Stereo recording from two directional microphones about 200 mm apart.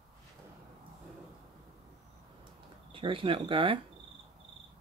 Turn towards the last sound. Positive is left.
turn(degrees=-25)  # may be behind; listen again after turning